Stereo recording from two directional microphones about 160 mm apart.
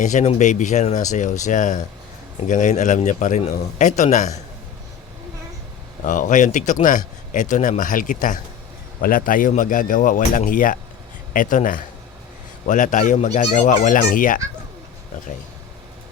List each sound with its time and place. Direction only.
0.0 s speech: 50° left (ahead or behind)
6.1 s a man's voice: 55° left (ahead or behind)